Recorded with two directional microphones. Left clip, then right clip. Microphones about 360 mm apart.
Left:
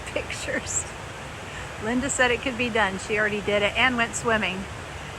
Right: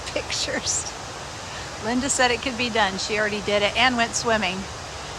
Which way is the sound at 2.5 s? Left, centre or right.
Right.